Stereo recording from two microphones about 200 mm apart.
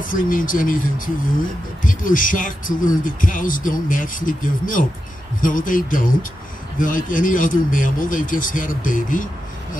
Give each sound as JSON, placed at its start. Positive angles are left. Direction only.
{"t": 0.1, "sound": "speech", "side_deg": 45}